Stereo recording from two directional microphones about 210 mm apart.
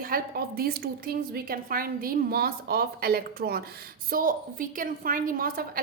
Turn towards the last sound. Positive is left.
turn(degrees=-45)  # may be behind; listen again after turning